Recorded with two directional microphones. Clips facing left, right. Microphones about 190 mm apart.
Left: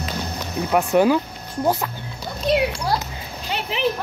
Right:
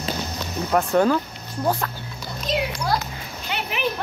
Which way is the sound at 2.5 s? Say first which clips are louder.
Left 6 dB; 60° left (ahead or behind).